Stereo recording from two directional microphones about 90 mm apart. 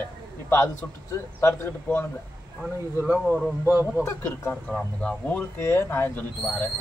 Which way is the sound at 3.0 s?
15° right (ahead or behind).